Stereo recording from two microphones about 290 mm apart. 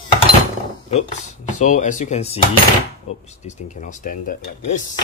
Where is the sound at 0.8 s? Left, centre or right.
Left.